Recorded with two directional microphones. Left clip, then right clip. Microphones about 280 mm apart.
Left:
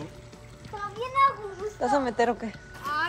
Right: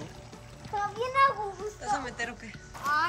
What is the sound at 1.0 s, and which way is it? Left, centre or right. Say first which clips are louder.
Child singing: left 2 dB; right.